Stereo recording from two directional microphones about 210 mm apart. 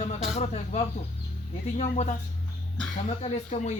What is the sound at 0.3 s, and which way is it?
Speech, 30° left (ahead or behind).